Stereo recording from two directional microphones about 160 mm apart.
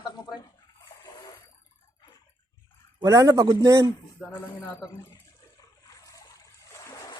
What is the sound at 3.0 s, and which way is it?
Speech, 20° right (ahead or behind).